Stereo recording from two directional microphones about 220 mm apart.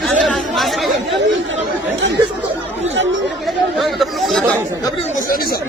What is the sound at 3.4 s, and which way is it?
Speech, centre (ahead or behind).